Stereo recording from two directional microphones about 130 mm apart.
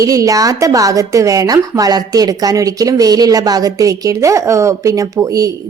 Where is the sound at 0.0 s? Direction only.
25° right (ahead or behind).